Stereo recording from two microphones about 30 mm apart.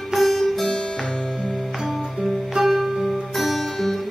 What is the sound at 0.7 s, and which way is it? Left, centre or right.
Music, centre.